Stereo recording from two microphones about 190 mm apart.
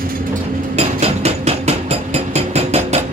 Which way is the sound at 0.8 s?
35° right (ahead or behind).